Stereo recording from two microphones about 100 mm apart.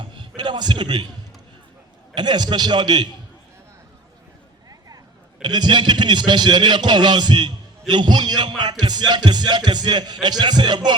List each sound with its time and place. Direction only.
0.0 s a sound: 50° right (ahead or behind)
2.1 s a man's voice: 45° right (ahead or behind)
5.4 s a man's voice: 45° right (ahead or behind)